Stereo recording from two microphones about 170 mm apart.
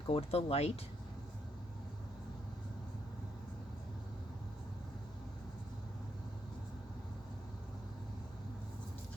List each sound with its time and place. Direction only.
0.1 s speech: 35° left (ahead or behind)